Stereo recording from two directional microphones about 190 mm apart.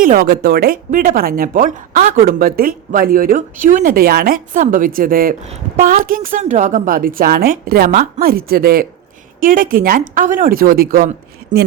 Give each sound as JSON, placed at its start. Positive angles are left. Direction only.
{"t": 0.0, "sound": "speech", "side_deg": -50}